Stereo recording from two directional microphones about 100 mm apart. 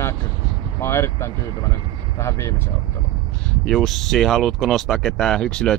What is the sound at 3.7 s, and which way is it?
Speech, centre (ahead or behind).